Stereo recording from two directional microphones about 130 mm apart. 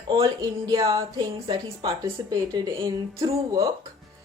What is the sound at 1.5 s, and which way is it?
Speech, 40° right (ahead or behind).